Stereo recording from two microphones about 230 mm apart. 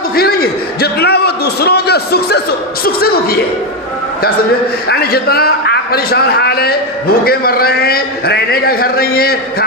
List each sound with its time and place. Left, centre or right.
0.2 s a man's voice: left
4.9 s a man's voice: left